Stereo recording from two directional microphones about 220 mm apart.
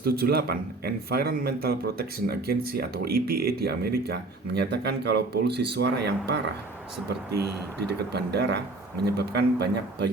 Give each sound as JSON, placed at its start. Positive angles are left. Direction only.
{"t": 0.0, "sound": "speech", "side_deg": -45}